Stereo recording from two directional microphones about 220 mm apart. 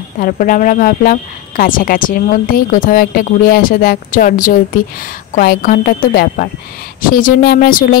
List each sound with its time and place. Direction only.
0.2 s a woman's voice: 35° left (ahead or behind)